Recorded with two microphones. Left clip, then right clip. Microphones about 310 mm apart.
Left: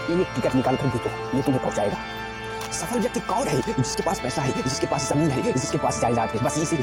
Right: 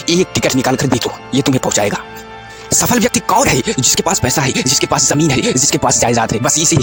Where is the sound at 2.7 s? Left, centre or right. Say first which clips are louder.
Right 13 dB; right.